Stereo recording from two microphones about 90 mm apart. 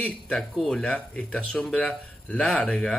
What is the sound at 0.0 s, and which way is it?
Speech, 10° left (ahead or behind).